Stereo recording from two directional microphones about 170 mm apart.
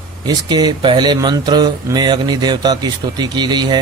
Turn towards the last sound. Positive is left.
turn(degrees=-25)  # may be behind; listen again after turning